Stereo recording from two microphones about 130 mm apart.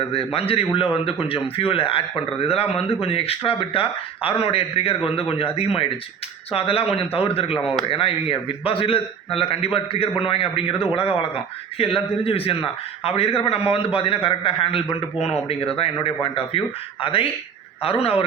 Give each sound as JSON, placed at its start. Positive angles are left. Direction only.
{"t": 0.1, "sound": "a man's voice", "side_deg": 45}
{"t": 15.8, "sound": "a man's voice", "side_deg": 45}